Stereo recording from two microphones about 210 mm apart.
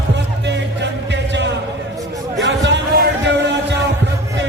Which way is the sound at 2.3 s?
55° right (ahead or behind).